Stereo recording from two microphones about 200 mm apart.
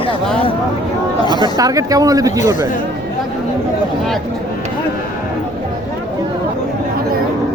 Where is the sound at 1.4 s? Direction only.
15° right (ahead or behind).